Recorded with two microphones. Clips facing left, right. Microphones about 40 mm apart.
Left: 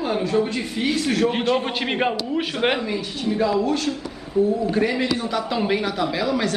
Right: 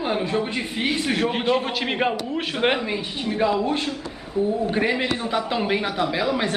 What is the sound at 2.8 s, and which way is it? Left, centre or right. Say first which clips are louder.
A man's voice: left 2 dB; centre.